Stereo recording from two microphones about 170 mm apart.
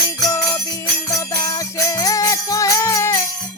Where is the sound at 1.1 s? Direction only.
20° left (ahead or behind).